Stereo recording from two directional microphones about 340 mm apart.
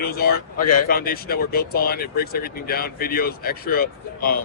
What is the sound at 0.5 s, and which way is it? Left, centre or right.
Speech, left.